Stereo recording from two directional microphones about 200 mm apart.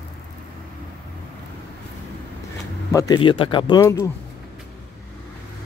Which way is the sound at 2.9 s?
20° left (ahead or behind).